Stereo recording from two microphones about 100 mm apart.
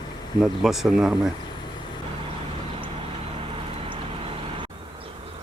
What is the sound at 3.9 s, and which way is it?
Vehicle, 60° right (ahead or behind).